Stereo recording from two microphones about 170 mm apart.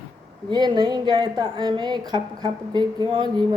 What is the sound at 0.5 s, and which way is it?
A woman's voice, 25° right (ahead or behind).